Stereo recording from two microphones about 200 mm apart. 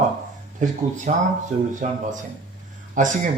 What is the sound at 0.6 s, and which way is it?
Speech, 40° right (ahead or behind).